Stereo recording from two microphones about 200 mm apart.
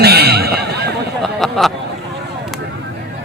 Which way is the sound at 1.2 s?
Centre (ahead or behind).